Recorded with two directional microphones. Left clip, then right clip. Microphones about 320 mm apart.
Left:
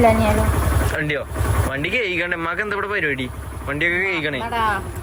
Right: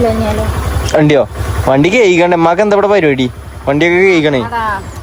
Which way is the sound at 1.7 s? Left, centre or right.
Centre.